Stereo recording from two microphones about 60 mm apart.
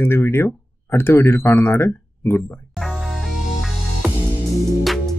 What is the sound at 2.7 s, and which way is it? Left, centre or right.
Music, centre.